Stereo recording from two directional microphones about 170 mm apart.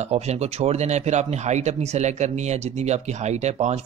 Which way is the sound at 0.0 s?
40° right (ahead or behind).